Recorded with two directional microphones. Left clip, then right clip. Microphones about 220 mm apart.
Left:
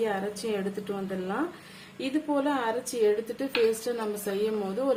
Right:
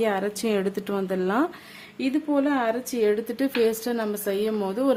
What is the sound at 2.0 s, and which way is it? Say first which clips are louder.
A woman's voice: right 4 dB; 35° right (ahead or behind).